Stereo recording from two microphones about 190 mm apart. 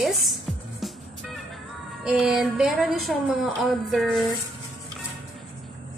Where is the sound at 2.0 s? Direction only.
5° right (ahead or behind).